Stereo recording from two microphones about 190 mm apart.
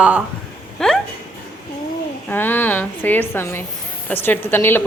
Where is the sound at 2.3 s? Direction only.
10° left (ahead or behind).